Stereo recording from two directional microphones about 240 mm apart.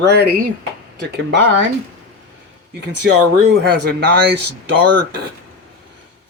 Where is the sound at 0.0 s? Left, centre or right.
Right.